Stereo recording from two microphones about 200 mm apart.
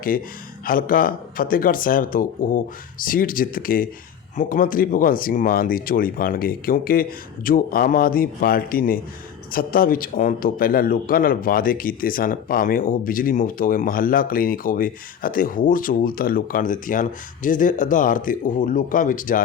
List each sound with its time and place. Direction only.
0.6 s a man's voice: 45° left (ahead or behind)